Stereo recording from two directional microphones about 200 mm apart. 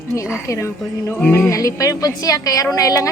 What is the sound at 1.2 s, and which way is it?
A woman's voice, 10° left (ahead or behind).